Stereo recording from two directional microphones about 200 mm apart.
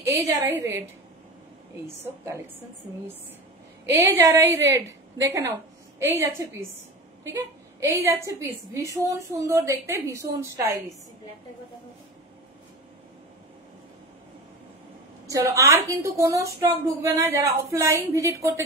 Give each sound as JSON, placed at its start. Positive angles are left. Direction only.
{"t": 0.0, "sound": "a woman's voice", "side_deg": -15}
{"t": 3.8, "sound": "a woman's voice", "side_deg": -10}
{"t": 7.8, "sound": "a woman's voice", "side_deg": -15}
{"t": 15.2, "sound": "a woman's voice", "side_deg": -15}